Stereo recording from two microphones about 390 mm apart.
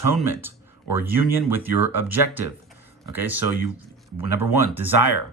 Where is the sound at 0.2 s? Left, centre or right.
Centre.